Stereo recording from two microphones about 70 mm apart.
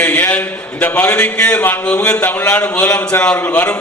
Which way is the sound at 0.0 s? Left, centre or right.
Centre.